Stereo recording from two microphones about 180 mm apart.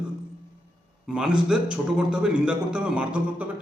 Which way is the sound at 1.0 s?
5° right (ahead or behind).